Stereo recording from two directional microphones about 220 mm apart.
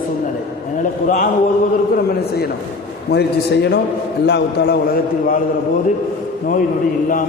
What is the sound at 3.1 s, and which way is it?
A man's voice, 50° left (ahead or behind).